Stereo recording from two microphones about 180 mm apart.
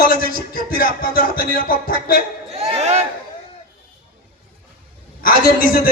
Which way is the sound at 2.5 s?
35° right (ahead or behind).